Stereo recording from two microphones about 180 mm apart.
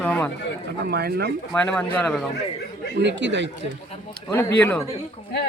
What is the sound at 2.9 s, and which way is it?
Speech, 80° right.